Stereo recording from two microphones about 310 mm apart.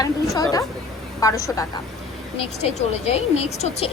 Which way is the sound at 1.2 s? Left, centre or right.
Centre.